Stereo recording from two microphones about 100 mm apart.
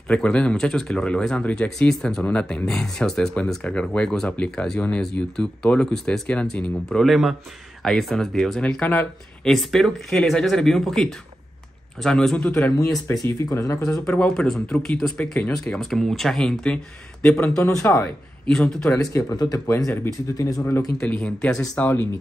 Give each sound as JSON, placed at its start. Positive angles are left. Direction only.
{"t": 0.1, "sound": "speech", "side_deg": 10}
{"t": 12.4, "sound": "speech", "side_deg": 15}
{"t": 13.1, "sound": "speech", "side_deg": 35}
{"t": 14.0, "sound": "speech", "side_deg": 10}
{"t": 17.6, "sound": "speech", "side_deg": 30}
{"t": 18.5, "sound": "speech", "side_deg": 5}
{"t": 19.1, "sound": "speech", "side_deg": 40}
{"t": 21.0, "sound": "speech", "side_deg": 10}